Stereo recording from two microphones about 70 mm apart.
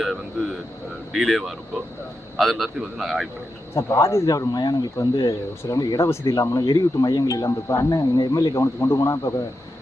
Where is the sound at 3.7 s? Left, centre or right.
Left.